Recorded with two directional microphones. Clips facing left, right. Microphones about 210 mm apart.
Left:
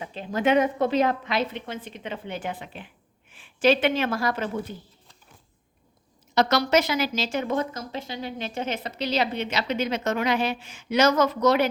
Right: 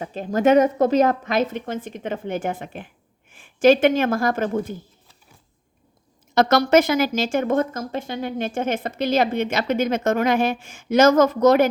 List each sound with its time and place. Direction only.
0.0 s speech: 45° right (ahead or behind)
6.3 s speech: 50° right (ahead or behind)